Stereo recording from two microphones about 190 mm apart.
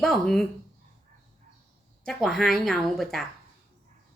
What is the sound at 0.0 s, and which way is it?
Speech, centre (ahead or behind).